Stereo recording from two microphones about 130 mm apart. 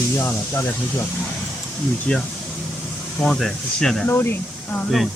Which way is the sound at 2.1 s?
10° left (ahead or behind).